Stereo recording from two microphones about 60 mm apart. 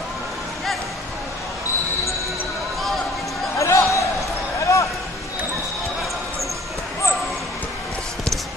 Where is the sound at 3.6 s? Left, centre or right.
Left.